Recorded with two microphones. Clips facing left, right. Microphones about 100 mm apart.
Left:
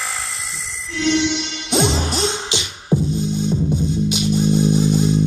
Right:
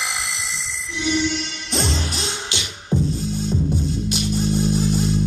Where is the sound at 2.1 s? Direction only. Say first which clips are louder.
Left 7 dB; 35° left (ahead or behind).